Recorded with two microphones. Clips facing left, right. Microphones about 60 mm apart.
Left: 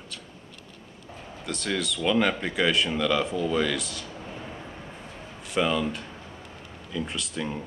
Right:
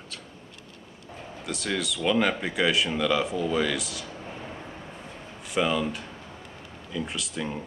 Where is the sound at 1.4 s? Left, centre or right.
Centre.